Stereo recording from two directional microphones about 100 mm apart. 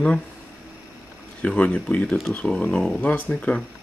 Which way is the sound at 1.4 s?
15° left (ahead or behind).